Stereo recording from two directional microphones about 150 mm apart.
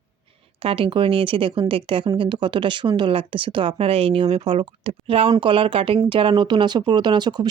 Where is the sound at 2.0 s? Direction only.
35° right (ahead or behind).